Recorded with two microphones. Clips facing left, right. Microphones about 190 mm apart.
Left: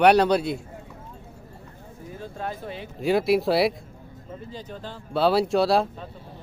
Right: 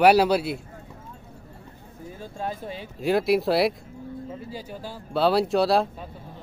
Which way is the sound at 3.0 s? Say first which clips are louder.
Even; centre (ahead or behind).